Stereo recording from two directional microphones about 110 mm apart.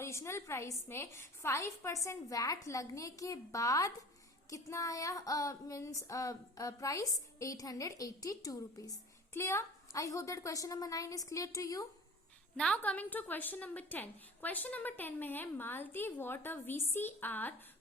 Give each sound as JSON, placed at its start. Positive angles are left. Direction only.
{"t": 0.0, "sound": "a woman's voice", "side_deg": 25}
{"t": 4.4, "sound": "female singing", "side_deg": 30}
{"t": 12.5, "sound": "a woman's voice", "side_deg": 10}